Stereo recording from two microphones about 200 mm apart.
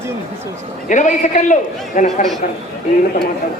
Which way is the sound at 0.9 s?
40° left (ahead or behind).